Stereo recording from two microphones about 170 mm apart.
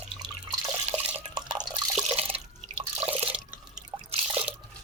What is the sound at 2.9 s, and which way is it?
Drip, 35° right (ahead or behind).